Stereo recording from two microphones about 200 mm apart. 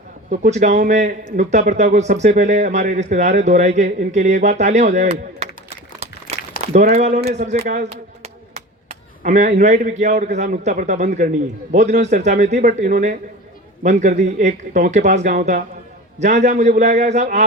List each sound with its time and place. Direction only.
0.3 s speech: 35° right (ahead or behind)
6.6 s a sound: 35° right (ahead or behind)
9.6 s speech: 35° right (ahead or behind)